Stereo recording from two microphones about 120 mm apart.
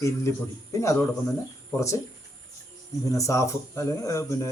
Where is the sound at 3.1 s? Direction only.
25° left (ahead or behind).